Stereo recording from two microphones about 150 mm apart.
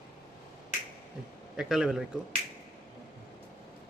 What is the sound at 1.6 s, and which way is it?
Speech, 5° right (ahead or behind).